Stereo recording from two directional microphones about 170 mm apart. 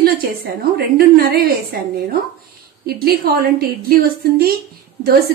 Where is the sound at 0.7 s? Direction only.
65° right (ahead or behind).